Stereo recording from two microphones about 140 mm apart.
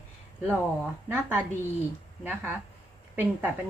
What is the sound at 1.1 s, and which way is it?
Speech, 15° right (ahead or behind).